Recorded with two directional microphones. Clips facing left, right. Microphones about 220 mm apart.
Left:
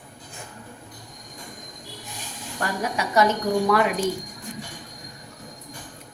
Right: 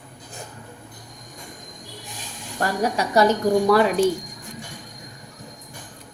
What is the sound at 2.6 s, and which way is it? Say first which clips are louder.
A woman's voice: right 4 dB; 35° right (ahead or behind).